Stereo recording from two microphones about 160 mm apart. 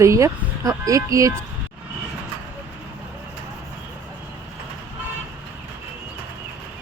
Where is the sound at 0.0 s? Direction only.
20° right (ahead or behind).